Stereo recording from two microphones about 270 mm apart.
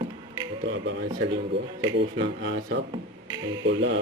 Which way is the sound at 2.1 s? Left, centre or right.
Right.